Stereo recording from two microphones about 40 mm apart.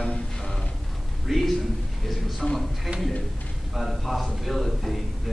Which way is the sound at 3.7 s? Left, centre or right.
Centre.